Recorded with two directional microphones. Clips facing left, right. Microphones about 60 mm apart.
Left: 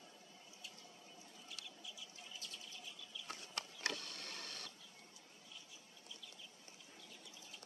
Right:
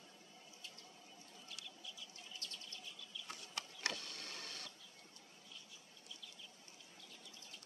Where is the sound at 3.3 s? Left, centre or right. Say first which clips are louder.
Left 2 dB; left.